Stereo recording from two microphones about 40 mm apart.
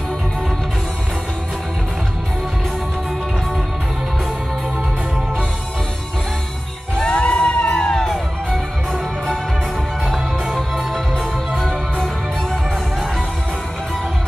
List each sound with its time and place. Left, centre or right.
7.0 s music: left
10.0 s music: centre
11.5 s music: centre